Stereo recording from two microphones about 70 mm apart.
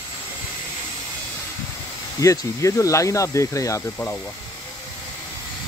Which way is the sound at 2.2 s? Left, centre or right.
Left.